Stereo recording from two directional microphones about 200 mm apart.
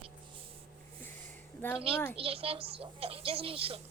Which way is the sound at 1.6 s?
10° left (ahead or behind).